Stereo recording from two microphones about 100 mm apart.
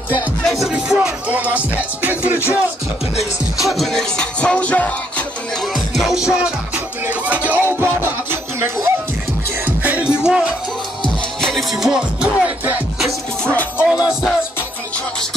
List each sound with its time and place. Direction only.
0.5 s music: 5° right (ahead or behind)
3.6 s music: centre (ahead or behind)
5.9 s music: 5° right (ahead or behind); by 8.9 s 25° right (ahead or behind)
9.7 s music: 15° right (ahead or behind)
13.5 s music: 15° left (ahead or behind)